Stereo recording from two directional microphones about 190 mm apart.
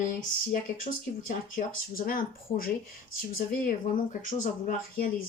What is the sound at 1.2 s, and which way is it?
Speech, 45° left (ahead or behind).